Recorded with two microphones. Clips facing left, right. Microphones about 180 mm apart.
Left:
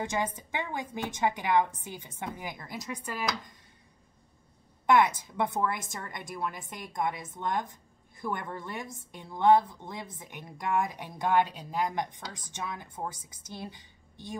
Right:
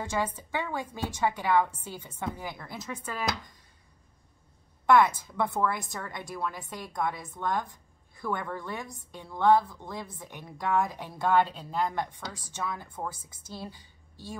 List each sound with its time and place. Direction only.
0.0 s a woman's voice: 20° left (ahead or behind)
4.8 s a woman's voice: 20° left (ahead or behind)